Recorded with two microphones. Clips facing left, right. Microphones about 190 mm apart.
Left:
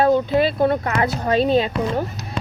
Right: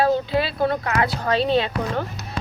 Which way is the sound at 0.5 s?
25° left (ahead or behind).